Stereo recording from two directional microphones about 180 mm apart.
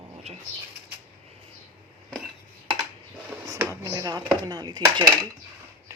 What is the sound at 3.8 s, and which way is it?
Speech, 20° right (ahead or behind).